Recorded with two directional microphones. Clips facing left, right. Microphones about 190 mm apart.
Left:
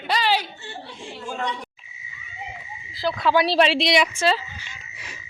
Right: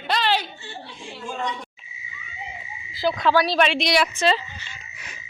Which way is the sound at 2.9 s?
Centre (ahead or behind).